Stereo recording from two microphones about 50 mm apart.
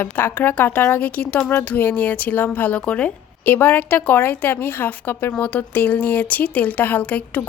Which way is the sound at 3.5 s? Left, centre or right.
Left.